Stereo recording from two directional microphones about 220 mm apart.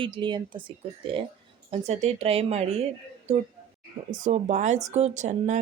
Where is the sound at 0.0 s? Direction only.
20° right (ahead or behind).